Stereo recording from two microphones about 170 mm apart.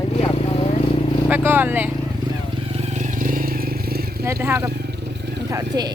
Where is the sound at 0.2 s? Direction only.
35° left (ahead or behind).